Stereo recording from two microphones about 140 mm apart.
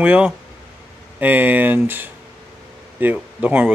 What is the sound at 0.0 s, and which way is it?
Speech, 10° right (ahead or behind).